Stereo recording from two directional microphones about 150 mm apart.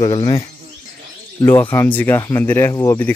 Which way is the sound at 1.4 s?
15° left (ahead or behind).